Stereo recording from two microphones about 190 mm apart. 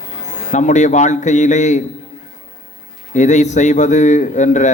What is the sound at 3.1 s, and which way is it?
A man's voice, 40° left (ahead or behind).